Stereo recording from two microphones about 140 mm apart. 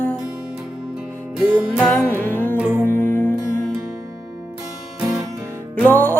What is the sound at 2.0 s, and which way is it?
Music, 15° left (ahead or behind).